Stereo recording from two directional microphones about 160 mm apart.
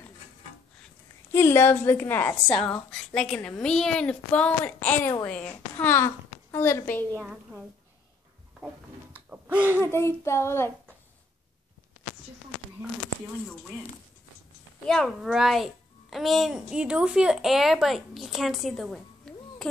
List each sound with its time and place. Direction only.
1.3 s a woman's voice: 15° left (ahead or behind)
7.2 s a woman's voice: 5° right (ahead or behind)
9.9 s a woman's voice: 15° left (ahead or behind)
14.9 s a child's voice: centre (ahead or behind)